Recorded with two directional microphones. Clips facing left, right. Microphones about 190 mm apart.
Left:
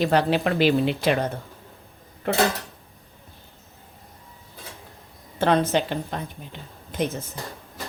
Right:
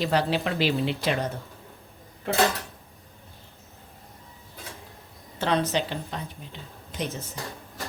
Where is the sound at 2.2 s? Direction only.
60° left (ahead or behind).